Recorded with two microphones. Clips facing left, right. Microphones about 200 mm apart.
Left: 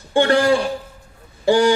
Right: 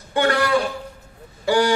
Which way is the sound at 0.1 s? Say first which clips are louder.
Left 4 dB; 25° left (ahead or behind).